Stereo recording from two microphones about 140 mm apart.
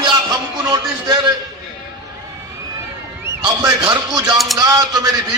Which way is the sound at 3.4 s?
30° right (ahead or behind).